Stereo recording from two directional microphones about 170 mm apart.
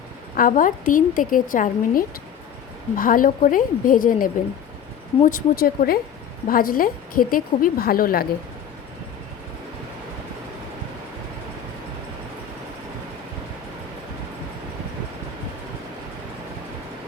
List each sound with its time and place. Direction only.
0.3 s a woman's voice: 55° left (ahead or behind)